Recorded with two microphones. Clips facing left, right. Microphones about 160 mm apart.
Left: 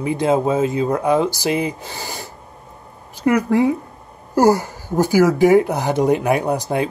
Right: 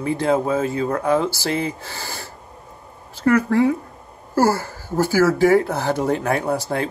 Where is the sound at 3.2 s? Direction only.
15° left (ahead or behind).